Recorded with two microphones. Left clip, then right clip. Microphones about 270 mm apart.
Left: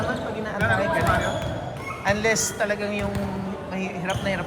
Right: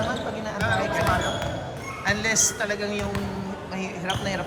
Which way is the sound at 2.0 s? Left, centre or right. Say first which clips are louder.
Left 1 dB; centre.